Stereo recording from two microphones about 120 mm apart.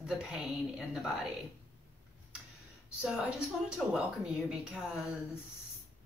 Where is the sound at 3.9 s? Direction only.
10° right (ahead or behind).